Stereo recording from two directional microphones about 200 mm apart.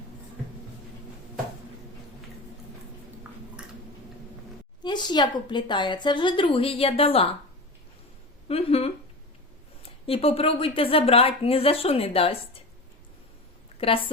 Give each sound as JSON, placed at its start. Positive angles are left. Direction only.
{"t": 4.8, "sound": "speech", "side_deg": 20}
{"t": 8.4, "sound": "a sound", "side_deg": 30}
{"t": 9.8, "sound": "speech", "side_deg": 30}
{"t": 13.7, "sound": "a woman's voice", "side_deg": 30}